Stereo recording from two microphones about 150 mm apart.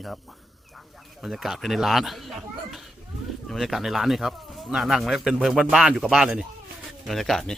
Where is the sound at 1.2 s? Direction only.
Centre (ahead or behind).